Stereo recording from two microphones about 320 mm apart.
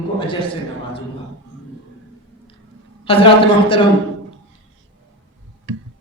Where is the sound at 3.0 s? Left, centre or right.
Centre.